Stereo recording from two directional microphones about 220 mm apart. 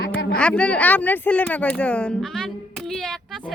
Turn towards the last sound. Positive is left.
turn(degrees=5)  # may be behind; listen again after turning